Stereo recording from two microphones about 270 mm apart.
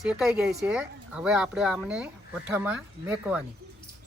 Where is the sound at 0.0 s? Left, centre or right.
Centre.